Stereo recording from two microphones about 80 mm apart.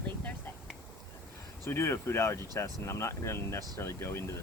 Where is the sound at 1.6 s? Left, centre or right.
Left.